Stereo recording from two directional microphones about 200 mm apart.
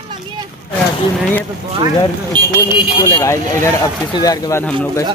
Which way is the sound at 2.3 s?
20° right (ahead or behind).